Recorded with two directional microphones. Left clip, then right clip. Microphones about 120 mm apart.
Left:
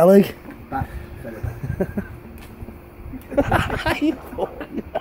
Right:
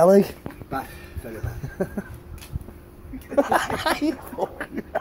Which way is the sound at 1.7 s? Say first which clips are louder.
Left 3 dB; 15° left (ahead or behind).